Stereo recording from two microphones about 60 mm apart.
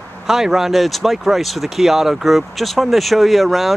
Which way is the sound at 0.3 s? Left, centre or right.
Centre.